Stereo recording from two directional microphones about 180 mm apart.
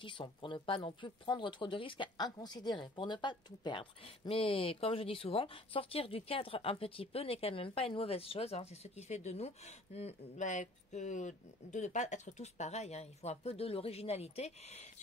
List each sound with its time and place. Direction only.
0.0 s speech: 25° left (ahead or behind)